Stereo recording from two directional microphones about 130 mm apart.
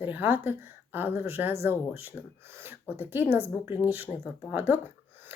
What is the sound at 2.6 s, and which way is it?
Speech, 15° right (ahead or behind).